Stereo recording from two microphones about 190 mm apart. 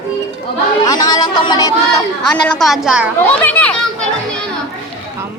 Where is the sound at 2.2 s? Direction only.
Centre (ahead or behind).